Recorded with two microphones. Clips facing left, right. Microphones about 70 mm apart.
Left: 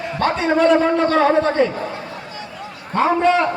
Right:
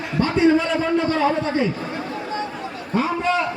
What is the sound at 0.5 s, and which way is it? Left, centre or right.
A man's voice, left.